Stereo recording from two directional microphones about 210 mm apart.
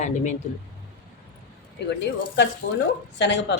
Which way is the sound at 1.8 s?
55° left (ahead or behind).